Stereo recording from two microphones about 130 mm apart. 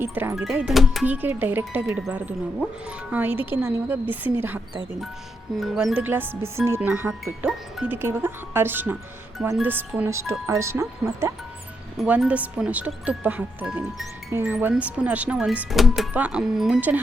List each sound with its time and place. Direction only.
0.0 s speech: 15° right (ahead or behind)
0.5 s speech: 5° right (ahead or behind)
1.0 s speech: 15° right (ahead or behind)
5.5 s speech: centre (ahead or behind)
7.1 s speech: 5° right (ahead or behind)
7.9 s speech: 20° right (ahead or behind)
12.2 s speech: 10° right (ahead or behind)